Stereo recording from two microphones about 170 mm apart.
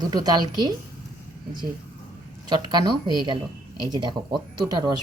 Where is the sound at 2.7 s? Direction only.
25° right (ahead or behind).